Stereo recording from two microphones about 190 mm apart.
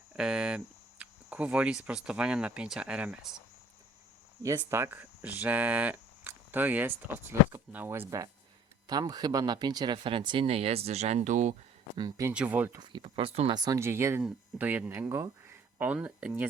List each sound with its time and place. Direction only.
0.2 s speech: 5° right (ahead or behind)
4.4 s speech: 15° right (ahead or behind); by 11.5 s 40° right (ahead or behind)
11.9 s speech: 20° right (ahead or behind)
12.3 s speech: 5° right (ahead or behind)
12.8 s speech: 25° right (ahead or behind)
13.6 s speech: 15° right (ahead or behind)